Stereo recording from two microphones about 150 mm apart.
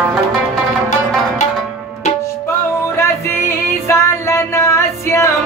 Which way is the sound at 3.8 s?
20° left (ahead or behind).